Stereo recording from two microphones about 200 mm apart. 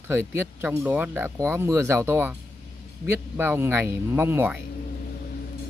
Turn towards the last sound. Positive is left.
turn(degrees=-10)  # may be behind; listen again after turning